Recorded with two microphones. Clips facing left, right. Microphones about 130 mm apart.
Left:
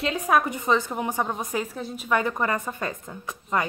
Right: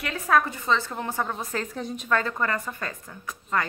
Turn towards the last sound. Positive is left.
turn(degrees=20)  # may be behind; listen again after turning